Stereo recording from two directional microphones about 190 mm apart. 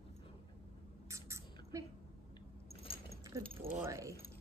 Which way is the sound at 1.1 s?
15° right (ahead or behind).